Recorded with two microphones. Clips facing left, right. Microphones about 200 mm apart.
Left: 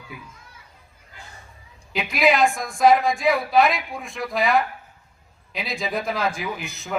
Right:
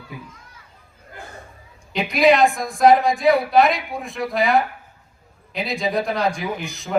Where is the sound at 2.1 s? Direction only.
Centre (ahead or behind).